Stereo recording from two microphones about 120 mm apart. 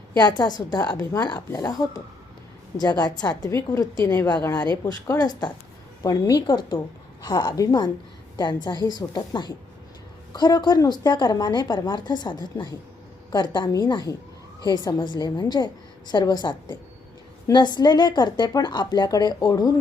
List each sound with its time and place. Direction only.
0.2 s a woman's voice: 35° left (ahead or behind)